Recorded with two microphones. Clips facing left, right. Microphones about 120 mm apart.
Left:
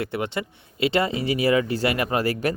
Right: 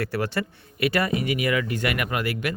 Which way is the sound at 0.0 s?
20° left (ahead or behind).